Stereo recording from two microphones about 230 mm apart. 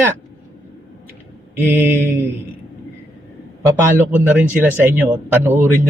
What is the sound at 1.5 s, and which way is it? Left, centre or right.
Speech, centre.